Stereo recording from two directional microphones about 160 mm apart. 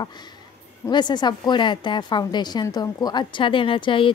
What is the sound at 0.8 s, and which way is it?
A woman's voice, 25° left (ahead or behind).